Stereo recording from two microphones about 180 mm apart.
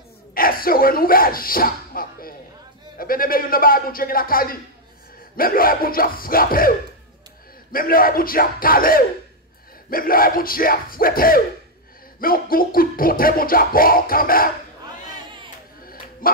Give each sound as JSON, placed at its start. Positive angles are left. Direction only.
{"t": 0.3, "sound": "speech", "side_deg": 55}
{"t": 3.0, "sound": "music", "side_deg": 55}
{"t": 7.7, "sound": "music", "side_deg": 55}
{"t": 15.8, "sound": "dog", "side_deg": 55}